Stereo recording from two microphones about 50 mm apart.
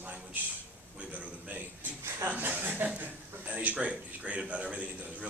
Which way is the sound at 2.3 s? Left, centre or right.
Right.